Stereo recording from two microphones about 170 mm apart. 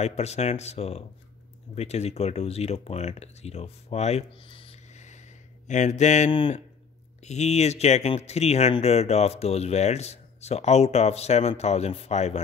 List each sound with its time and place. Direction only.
0.0 s speech: 40° left (ahead or behind)
5.7 s mantra: 45° left (ahead or behind)
7.2 s speech: 40° left (ahead or behind)